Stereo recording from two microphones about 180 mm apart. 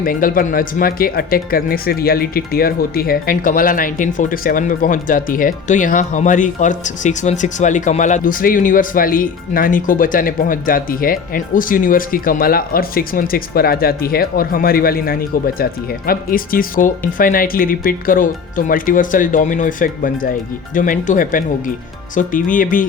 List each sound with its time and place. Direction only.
0.0 s speech: 50° left (ahead or behind)